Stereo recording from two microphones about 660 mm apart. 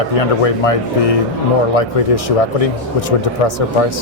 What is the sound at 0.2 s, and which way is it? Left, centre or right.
Speech, left.